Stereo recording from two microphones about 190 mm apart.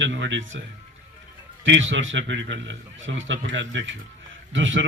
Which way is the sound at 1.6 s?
80° right.